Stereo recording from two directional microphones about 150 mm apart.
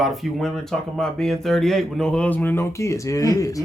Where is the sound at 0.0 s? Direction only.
Centre (ahead or behind); by 3.6 s 20° left (ahead or behind).